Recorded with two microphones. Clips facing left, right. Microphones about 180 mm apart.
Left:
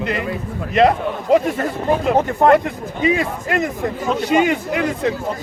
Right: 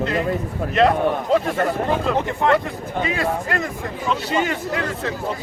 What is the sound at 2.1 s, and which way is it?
Speech, 40° left (ahead or behind).